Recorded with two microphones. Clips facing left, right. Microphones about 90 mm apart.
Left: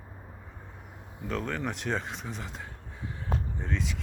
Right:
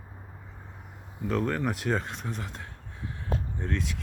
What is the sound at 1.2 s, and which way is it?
Speech, 5° right (ahead or behind).